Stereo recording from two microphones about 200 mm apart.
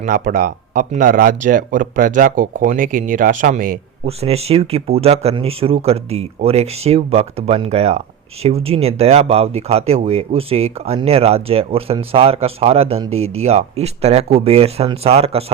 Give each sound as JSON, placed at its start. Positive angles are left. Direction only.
{"t": 0.0, "sound": "speech", "side_deg": -40}
{"t": 4.0, "sound": "speech", "side_deg": -30}